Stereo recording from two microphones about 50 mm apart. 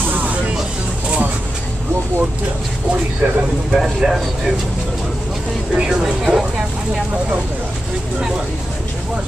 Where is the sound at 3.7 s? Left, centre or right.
Centre.